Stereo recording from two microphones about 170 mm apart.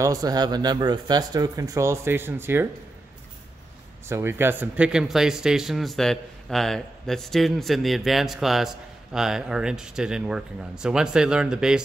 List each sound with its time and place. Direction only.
0.0 s speech: 20° right (ahead or behind)
4.1 s speech: 15° right (ahead or behind)